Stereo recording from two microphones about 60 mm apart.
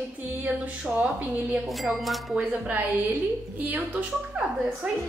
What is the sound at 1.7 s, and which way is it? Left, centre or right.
Speech, centre.